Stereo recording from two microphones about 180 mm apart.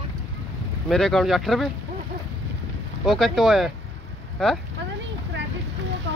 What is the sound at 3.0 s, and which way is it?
Speech, centre (ahead or behind).